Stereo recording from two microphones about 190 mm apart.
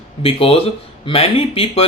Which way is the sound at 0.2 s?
30° left (ahead or behind).